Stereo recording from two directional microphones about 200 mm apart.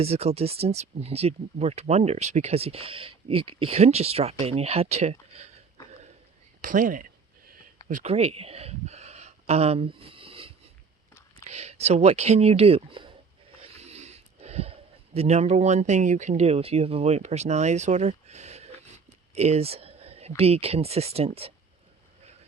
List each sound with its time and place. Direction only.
0.0 s speech: 30° right (ahead or behind)
6.6 s a sound: 40° right (ahead or behind)
7.9 s speech: 35° right (ahead or behind)